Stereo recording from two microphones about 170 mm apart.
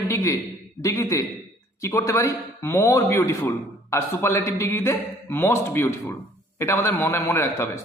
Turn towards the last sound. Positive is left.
turn(degrees=15)  # may be behind; listen again after turning